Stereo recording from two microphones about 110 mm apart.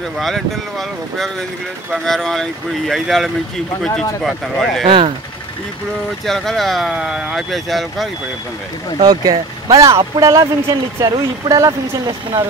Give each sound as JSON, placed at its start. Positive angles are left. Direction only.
{"t": 0.2, "sound": "speech", "side_deg": 0}
{"t": 4.8, "sound": "speech", "side_deg": -50}
{"t": 6.2, "sound": "speech", "side_deg": 0}
{"t": 9.0, "sound": "speech", "side_deg": -35}